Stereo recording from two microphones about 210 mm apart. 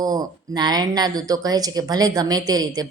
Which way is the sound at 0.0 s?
20° right (ahead or behind).